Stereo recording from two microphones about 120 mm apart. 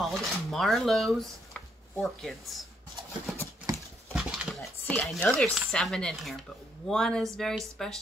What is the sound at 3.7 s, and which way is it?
Horse, 30° right (ahead or behind).